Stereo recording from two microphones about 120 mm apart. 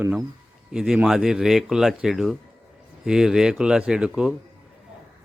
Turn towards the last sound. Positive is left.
turn(degrees=-5)  # may be behind; listen again after turning